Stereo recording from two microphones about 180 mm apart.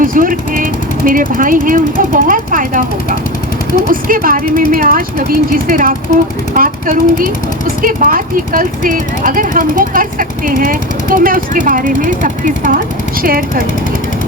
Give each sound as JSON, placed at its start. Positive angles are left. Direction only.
{"t": 0.0, "sound": "speech", "side_deg": -50}
{"t": 3.8, "sound": "speech", "side_deg": -50}